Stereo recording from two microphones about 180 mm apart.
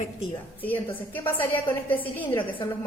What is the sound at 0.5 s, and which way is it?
A woman's voice, 10° left (ahead or behind).